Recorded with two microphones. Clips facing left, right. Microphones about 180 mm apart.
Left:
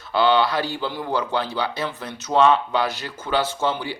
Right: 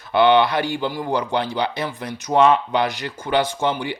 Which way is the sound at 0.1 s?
20° right (ahead or behind).